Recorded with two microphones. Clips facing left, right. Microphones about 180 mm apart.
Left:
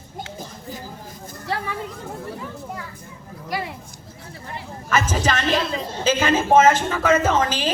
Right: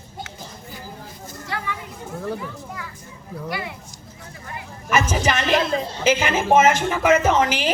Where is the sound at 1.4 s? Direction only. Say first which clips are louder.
Left 3 dB; 35° left (ahead or behind).